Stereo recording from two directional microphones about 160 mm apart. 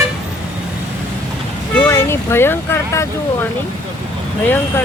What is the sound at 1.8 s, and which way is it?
Speech, 15° left (ahead or behind).